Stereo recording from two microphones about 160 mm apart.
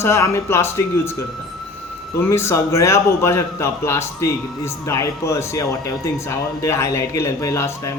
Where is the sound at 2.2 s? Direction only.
15° left (ahead or behind).